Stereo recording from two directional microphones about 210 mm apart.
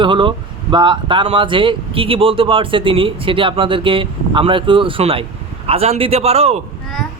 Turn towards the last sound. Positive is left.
turn(degrees=-30)  # may be behind; listen again after turning